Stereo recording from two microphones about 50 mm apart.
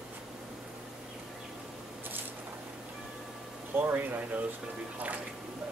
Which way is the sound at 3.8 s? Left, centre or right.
Right.